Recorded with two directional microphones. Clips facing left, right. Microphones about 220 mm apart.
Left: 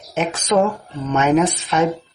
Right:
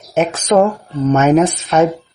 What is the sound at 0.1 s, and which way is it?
Speech, 50° right (ahead or behind).